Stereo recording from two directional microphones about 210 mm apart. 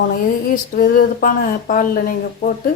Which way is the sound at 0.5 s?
40° left (ahead or behind).